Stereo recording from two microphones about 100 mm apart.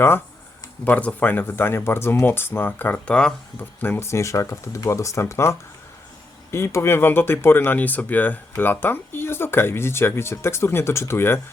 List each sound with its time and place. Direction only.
0.9 s speech: 15° left (ahead or behind)
3.6 s speech: 20° left (ahead or behind)